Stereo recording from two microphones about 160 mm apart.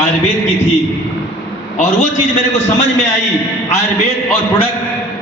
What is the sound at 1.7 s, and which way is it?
Speech, 50° left (ahead or behind).